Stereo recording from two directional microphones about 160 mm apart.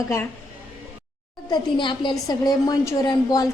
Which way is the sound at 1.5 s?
30° left (ahead or behind).